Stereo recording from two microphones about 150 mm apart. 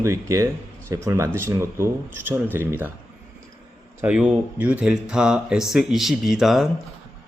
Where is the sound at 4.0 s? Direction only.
5° right (ahead or behind).